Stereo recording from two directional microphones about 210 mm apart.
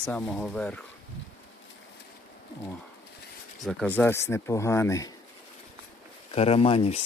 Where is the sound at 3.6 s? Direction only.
5° left (ahead or behind).